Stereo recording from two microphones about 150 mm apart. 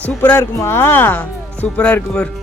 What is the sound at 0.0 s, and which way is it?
Speech, 10° left (ahead or behind).